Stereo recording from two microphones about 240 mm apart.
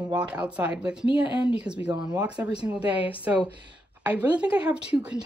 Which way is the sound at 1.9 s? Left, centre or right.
Centre.